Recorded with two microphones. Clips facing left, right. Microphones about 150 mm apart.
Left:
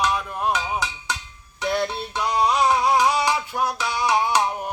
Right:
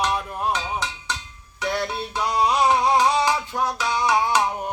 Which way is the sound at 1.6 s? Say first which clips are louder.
Left 2 dB; 15° left (ahead or behind).